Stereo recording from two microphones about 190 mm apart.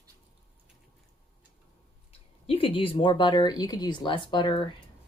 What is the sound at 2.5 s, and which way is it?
Speech, 30° left (ahead or behind).